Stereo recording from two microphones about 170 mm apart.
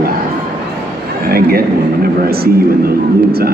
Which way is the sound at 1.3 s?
65° right (ahead or behind).